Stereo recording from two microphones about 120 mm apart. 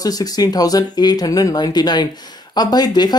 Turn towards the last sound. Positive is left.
turn(degrees=35)  # may be behind; listen again after turning